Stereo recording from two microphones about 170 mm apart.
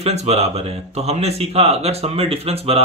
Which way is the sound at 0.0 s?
40° right (ahead or behind).